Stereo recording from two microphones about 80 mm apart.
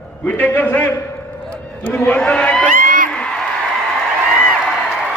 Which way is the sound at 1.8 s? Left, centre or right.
Centre.